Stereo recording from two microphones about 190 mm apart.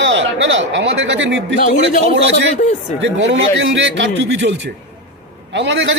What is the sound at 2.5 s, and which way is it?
Speech, 40° left (ahead or behind).